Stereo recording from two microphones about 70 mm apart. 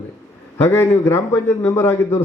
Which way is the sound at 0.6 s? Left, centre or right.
Left.